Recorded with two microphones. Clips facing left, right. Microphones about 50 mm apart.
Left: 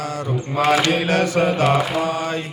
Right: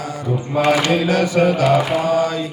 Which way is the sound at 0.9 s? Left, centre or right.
Left.